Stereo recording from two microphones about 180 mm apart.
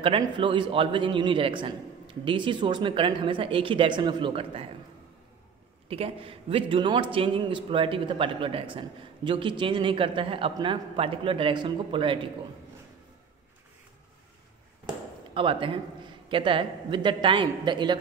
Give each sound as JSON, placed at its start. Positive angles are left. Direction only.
{"t": 0.0, "sound": "a man's voice", "side_deg": -30}
{"t": 5.9, "sound": "a man's voice", "side_deg": -35}
{"t": 15.3, "sound": "a man's voice", "side_deg": -30}